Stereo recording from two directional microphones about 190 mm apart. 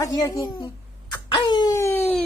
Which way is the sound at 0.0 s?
20° left (ahead or behind).